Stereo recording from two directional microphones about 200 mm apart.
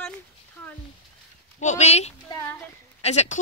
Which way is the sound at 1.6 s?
35° left (ahead or behind).